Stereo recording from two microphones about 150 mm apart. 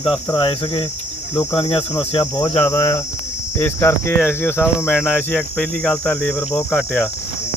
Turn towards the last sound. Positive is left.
turn(degrees=5)  # may be behind; listen again after turning